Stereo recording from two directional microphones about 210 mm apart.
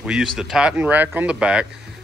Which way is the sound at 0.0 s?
5° right (ahead or behind).